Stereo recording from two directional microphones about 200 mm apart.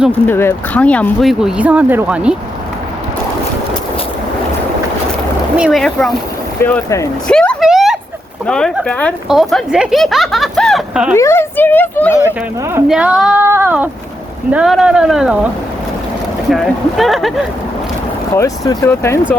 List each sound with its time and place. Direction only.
0.3 s speech: 10° left (ahead or behind); by 2.3 s 5° right (ahead or behind)
5.5 s speech: centre (ahead or behind)
7.3 s a sound: 5° left (ahead or behind)
8.4 s speech: 5° left (ahead or behind)
11.1 s speech: 15° left (ahead or behind)
12.9 s speech: 5° right (ahead or behind)
16.5 s speech: centre (ahead or behind)
18.3 s speech: 15° left (ahead or behind)